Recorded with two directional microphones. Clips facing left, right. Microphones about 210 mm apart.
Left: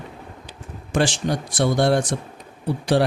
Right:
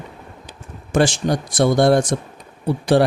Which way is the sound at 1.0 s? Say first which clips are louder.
Right 4 dB; 45° right (ahead or behind).